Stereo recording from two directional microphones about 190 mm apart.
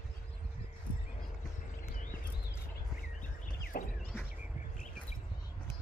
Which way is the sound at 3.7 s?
55° left (ahead or behind).